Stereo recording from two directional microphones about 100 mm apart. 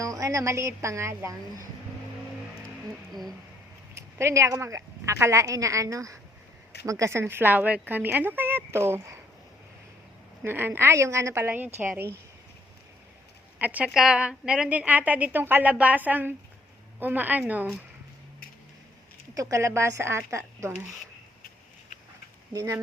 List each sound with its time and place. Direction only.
0.0 s a woman's voice: 35° right (ahead or behind)
3.1 s speech: centre (ahead or behind)
3.9 s a woman's voice: 30° right (ahead or behind)
10.4 s a woman's voice: 20° right (ahead or behind)
13.6 s a woman's voice: 15° right (ahead or behind)
19.3 s a woman's voice: 30° right (ahead or behind)
22.5 s a woman's voice: 30° right (ahead or behind)